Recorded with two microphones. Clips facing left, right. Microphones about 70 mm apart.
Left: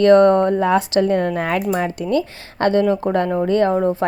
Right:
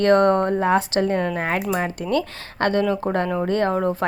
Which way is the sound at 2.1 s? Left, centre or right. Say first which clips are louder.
Left 3 dB; right.